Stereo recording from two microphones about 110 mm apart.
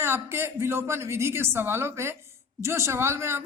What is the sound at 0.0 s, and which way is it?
A man's voice, 20° right (ahead or behind).